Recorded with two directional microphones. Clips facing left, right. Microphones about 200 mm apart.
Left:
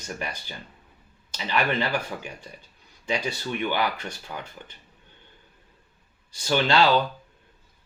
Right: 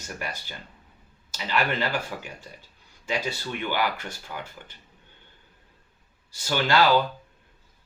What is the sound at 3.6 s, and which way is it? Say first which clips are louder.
Speech: left 1 dB; 20° left (ahead or behind).